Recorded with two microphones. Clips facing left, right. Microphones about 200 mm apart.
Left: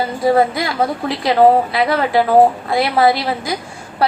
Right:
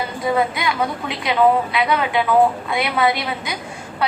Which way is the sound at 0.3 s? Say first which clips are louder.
Left 5 dB; 35° left (ahead or behind).